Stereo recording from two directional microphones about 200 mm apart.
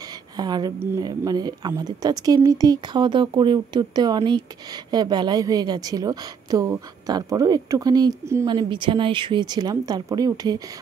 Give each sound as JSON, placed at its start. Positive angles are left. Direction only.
{"t": 0.4, "sound": "a woman's voice", "side_deg": -20}